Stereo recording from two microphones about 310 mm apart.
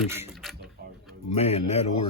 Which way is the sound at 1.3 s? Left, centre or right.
Centre.